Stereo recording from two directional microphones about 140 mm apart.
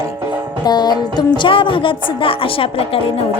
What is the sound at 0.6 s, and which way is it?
Music, 30° left (ahead or behind).